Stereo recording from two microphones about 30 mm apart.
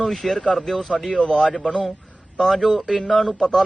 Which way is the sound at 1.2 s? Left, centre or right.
Left.